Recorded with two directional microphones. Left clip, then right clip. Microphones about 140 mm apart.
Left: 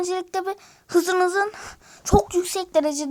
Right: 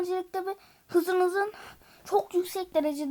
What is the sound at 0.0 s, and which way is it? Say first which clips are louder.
Speech: left 5 dB; 30° left (ahead or behind).